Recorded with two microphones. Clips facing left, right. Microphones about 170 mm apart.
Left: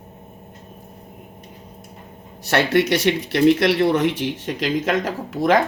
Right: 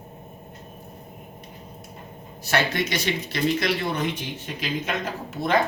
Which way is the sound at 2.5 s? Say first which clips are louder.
Left 7 dB; 70° left (ahead or behind).